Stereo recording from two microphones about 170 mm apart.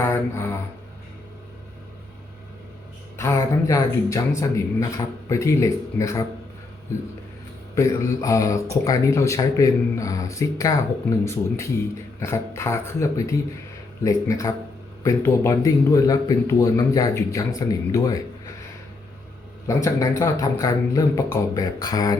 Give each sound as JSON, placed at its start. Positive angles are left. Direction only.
{"t": 0.0, "sound": "a sound", "side_deg": 15}
{"t": 3.2, "sound": "speech", "side_deg": 15}
{"t": 7.8, "sound": "speech", "side_deg": 20}
{"t": 19.6, "sound": "speech", "side_deg": 20}